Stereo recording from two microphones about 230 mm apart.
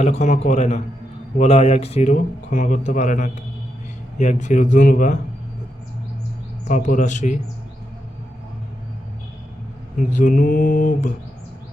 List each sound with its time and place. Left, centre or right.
0.0 s speech: left
6.7 s speech: left
10.0 s speech: left